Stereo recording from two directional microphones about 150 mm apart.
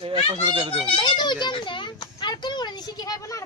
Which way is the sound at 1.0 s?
30° left (ahead or behind).